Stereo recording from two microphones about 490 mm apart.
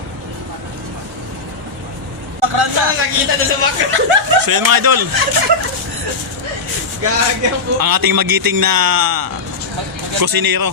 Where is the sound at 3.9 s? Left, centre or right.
Right.